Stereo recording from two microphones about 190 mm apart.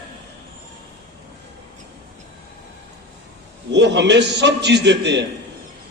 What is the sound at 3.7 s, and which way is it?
A man's voice, 65° right (ahead or behind).